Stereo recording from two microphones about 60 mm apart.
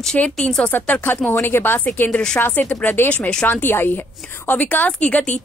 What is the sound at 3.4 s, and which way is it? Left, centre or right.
Speech, left.